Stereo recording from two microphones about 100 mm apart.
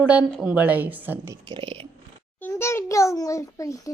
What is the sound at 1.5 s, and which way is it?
Speech, 55° right (ahead or behind).